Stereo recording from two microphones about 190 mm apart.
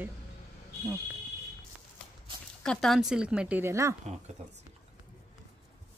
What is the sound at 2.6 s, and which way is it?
Speech, 5° left (ahead or behind).